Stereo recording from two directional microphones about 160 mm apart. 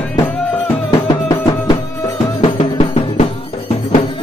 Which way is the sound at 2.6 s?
40° left (ahead or behind).